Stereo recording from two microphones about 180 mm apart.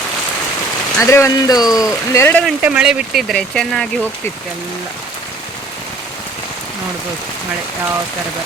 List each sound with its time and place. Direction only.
0.9 s speech: 15° left (ahead or behind)
2.4 s speech: 5° right (ahead or behind)